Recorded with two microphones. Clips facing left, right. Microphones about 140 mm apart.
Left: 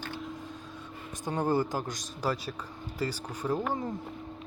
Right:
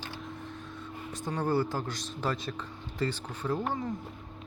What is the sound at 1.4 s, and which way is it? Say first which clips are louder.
A man's voice: left 1 dB; 15° left (ahead or behind).